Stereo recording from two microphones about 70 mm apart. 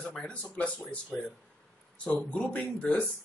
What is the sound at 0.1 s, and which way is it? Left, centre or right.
Speech, centre.